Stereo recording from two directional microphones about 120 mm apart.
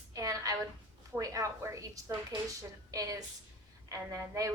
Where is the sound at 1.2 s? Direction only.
25° right (ahead or behind).